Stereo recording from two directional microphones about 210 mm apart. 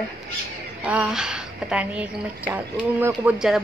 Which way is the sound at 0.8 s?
5° right (ahead or behind).